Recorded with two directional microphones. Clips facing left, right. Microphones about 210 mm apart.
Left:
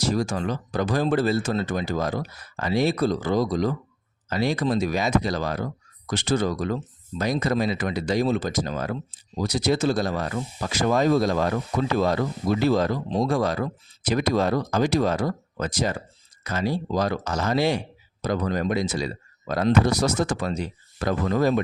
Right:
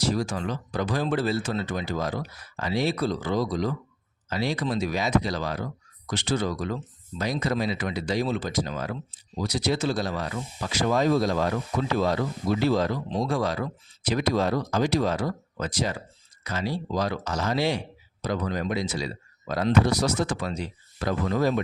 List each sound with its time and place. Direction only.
0.0 s speech: 45° left (ahead or behind)